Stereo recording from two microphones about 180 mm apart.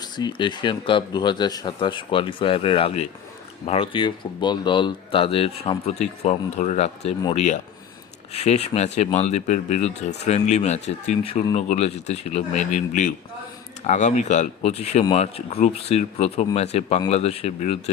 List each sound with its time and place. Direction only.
0.0 s speech: 25° left (ahead or behind)